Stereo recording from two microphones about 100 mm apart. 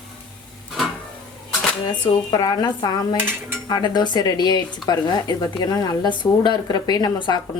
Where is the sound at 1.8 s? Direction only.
45° left (ahead or behind).